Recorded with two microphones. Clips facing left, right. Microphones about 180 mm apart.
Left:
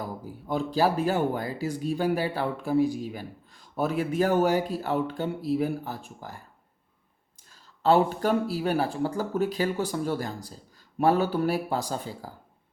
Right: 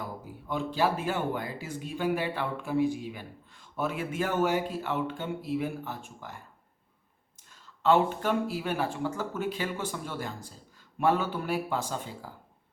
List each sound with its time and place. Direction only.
0.0 s speech: 35° left (ahead or behind)
7.5 s speech: 35° left (ahead or behind)